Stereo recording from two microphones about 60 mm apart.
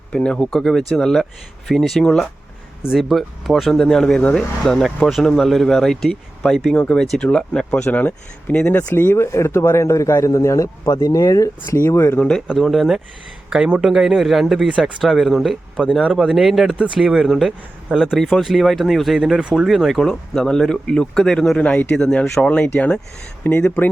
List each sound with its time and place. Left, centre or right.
0.1 s speech: centre
0.5 s speech: centre
6.7 s speech: centre
7.9 s speech: left
9.0 s speech: left
11.8 s speech: left
12.5 s speech: centre
13.5 s speech: centre
15.8 s speech: centre
16.1 s speech: centre
19.4 s speech: centre
19.6 s speech: centre; by 23.9 s left